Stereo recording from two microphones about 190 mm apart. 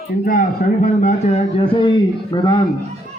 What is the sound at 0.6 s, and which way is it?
Speech, 45° left (ahead or behind).